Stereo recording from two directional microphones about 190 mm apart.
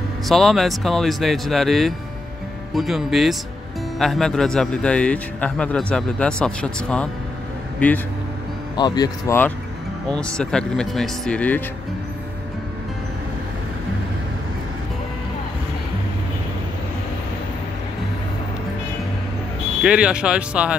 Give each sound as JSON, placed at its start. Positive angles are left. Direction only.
{"t": 0.3, "sound": "a man's voice", "side_deg": 0}
{"t": 8.7, "sound": "speech", "side_deg": 20}
{"t": 10.0, "sound": "a man's voice", "side_deg": 5}
{"t": 19.8, "sound": "a man's voice", "side_deg": -5}